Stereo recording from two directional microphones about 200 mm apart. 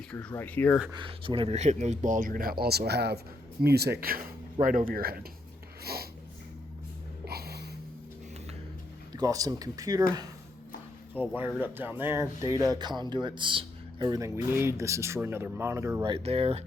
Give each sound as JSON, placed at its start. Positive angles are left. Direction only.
{"t": 0.1, "sound": "speech", "side_deg": 5}
{"t": 0.9, "sound": "speech", "side_deg": -25}
{"t": 5.8, "sound": "snort", "side_deg": -50}
{"t": 7.3, "sound": "a sound", "side_deg": -50}
{"t": 9.1, "sound": "speech", "side_deg": -20}
{"t": 11.3, "sound": "speech", "side_deg": -10}
{"t": 16.0, "sound": "speech", "side_deg": -30}